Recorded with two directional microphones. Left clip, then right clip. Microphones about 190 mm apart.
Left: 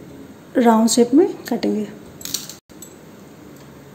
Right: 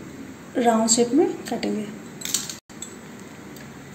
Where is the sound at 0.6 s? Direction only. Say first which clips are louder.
Left 5 dB; 30° left (ahead or behind).